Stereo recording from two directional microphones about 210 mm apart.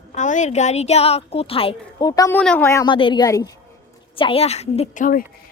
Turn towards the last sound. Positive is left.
turn(degrees=40)  # may be behind; listen again after turning